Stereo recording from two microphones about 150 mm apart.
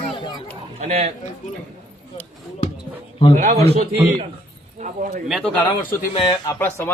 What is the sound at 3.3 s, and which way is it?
Speech, 50° right (ahead or behind).